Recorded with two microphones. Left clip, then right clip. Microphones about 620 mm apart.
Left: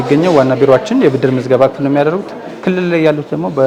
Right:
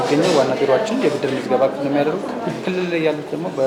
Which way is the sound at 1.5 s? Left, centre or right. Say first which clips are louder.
Left 6 dB; left.